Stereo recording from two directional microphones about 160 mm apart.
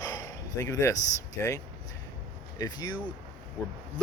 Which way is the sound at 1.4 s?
20° left (ahead or behind).